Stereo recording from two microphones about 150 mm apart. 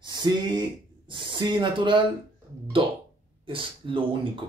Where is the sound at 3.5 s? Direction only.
35° right (ahead or behind).